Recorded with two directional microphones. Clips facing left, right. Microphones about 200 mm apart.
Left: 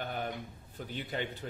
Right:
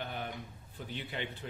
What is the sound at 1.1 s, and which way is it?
Speech, 40° left (ahead or behind).